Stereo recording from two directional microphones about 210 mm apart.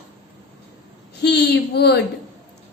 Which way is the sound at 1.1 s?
50° left (ahead or behind).